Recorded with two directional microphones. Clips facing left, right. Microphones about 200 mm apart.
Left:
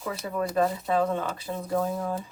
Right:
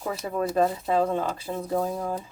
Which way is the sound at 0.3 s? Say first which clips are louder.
Right 2 dB; 25° right (ahead or behind).